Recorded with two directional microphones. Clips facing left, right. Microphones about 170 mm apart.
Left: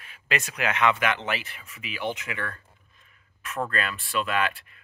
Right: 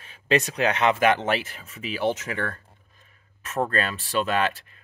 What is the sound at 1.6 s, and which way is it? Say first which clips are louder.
Speech: right 6 dB; 35° right (ahead or behind).